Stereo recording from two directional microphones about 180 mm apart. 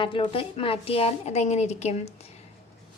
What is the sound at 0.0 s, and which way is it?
A woman's voice, 30° left (ahead or behind).